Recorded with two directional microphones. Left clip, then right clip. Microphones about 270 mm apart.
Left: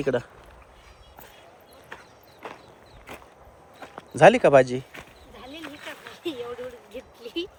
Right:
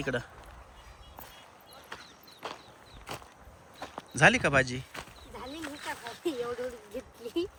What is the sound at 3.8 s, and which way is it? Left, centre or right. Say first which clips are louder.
Walk: left 8 dB; centre.